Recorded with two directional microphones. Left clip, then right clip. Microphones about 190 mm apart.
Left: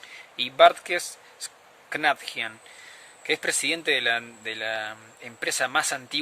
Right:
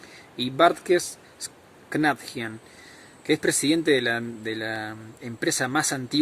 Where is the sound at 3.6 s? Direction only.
30° left (ahead or behind).